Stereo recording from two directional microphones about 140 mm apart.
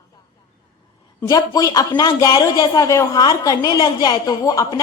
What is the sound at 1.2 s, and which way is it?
A woman's voice, 25° left (ahead or behind).